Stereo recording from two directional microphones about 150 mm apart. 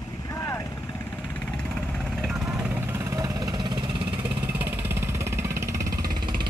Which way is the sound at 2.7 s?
20° right (ahead or behind).